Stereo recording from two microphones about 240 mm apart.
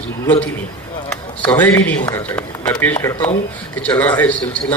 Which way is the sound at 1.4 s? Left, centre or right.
Centre.